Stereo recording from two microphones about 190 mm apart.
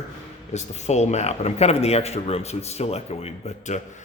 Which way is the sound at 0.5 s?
35° left (ahead or behind).